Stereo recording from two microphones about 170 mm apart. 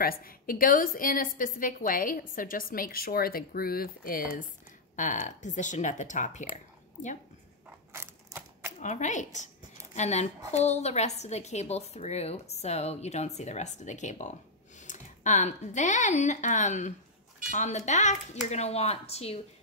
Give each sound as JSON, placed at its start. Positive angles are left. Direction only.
{"t": 0.0, "sound": "a woman's voice", "side_deg": 60}
{"t": 4.9, "sound": "speech", "side_deg": 45}
{"t": 6.5, "sound": "a sound", "side_deg": 45}
{"t": 7.9, "sound": "typewriter", "side_deg": -15}
{"t": 8.8, "sound": "a woman's voice", "side_deg": 45}